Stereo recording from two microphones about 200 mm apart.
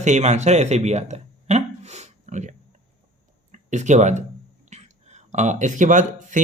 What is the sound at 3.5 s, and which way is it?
Speech, 35° right (ahead or behind).